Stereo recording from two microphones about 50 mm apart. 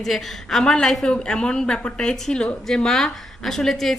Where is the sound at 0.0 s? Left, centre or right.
Centre.